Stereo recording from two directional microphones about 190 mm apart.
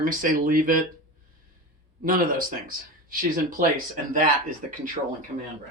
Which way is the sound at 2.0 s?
45° right (ahead or behind).